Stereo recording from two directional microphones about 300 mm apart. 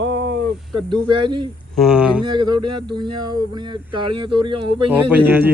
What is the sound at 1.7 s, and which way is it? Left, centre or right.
Speech, centre.